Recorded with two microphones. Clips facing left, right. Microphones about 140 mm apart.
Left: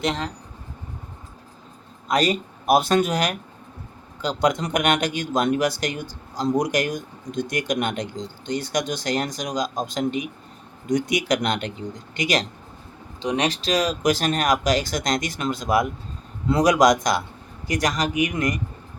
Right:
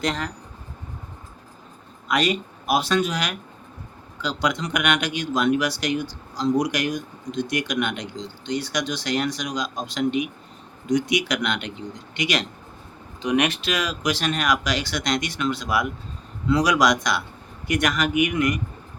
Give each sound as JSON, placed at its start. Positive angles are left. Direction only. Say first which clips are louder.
{"t": 0.0, "sound": "speech", "louder": "left 1 dB", "side_deg": 25}
{"t": 2.0, "sound": "speech", "louder": "left 1 dB", "side_deg": 40}
{"t": 10.8, "sound": "speech", "louder": "even", "side_deg": 50}
{"t": 13.2, "sound": "speech", "louder": "right 1 dB", "side_deg": 30}